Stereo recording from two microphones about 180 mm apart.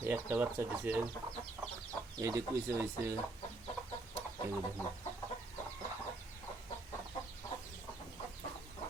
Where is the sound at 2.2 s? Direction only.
15° right (ahead or behind).